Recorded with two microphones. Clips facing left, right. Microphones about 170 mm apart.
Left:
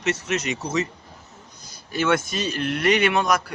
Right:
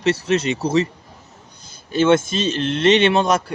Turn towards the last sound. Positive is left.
turn(degrees=-25)  # may be behind; listen again after turning